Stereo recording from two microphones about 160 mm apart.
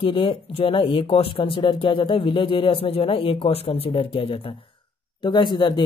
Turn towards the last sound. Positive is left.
turn(degrees=30)  # may be behind; listen again after turning